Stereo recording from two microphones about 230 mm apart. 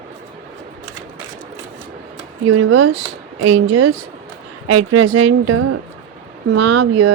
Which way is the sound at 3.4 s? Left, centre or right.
Right.